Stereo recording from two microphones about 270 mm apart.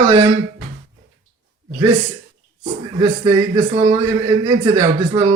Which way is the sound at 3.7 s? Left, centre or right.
Centre.